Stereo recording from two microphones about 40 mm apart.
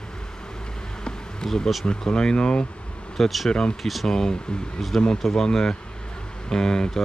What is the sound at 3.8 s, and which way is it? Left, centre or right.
Speech, centre.